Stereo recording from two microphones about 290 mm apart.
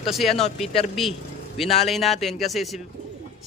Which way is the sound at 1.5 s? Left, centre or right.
Centre.